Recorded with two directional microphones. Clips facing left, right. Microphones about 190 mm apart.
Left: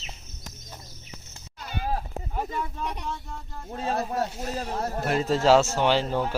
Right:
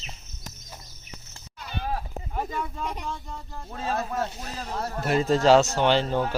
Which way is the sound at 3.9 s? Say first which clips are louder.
Left 1 dB; 35° left (ahead or behind).